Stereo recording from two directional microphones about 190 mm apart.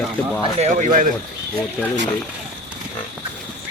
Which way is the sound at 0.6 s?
40° right (ahead or behind).